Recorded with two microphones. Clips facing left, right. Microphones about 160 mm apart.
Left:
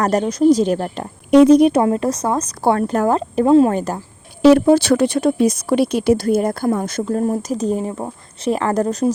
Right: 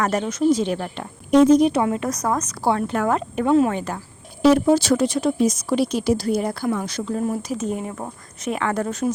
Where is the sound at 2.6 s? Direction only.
45° left (ahead or behind).